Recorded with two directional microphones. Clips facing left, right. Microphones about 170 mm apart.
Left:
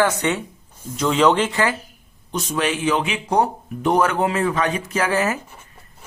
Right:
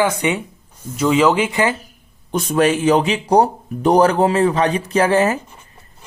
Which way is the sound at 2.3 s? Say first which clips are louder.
Right 7 dB; 50° right (ahead or behind).